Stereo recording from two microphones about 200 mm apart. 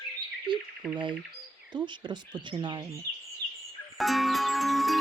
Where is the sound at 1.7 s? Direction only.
20° right (ahead or behind).